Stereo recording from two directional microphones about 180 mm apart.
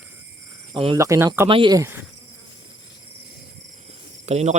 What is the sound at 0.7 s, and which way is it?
Speech, 30° right (ahead or behind).